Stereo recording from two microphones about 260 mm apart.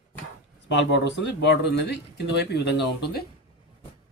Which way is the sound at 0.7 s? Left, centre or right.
Left.